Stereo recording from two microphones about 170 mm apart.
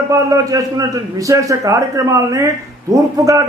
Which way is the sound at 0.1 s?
20° right (ahead or behind).